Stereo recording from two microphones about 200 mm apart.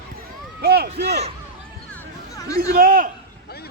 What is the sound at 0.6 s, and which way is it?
Speech, 55° right (ahead or behind).